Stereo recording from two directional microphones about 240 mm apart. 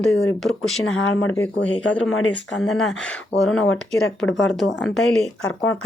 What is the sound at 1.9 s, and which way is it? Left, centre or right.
Speech, centre.